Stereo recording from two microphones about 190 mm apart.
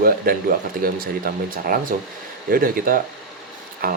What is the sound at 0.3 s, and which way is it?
Speech, 50° right (ahead or behind).